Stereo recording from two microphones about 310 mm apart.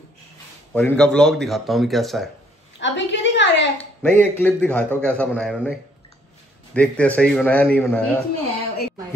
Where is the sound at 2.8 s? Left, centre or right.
Left.